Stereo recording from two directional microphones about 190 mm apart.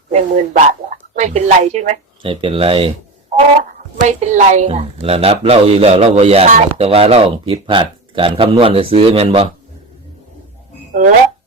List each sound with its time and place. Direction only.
0.1 s a woman's voice: 35° right (ahead or behind)